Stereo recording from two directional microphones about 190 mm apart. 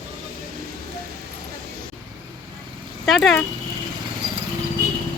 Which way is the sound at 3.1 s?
Centre (ahead or behind).